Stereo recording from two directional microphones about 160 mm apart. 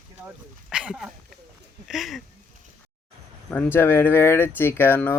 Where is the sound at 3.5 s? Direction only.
10° left (ahead or behind).